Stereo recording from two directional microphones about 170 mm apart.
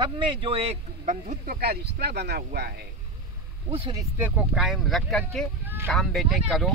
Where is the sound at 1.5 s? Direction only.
65° right (ahead or behind).